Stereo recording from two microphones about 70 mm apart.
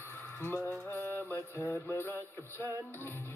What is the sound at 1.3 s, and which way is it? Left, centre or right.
Music, left.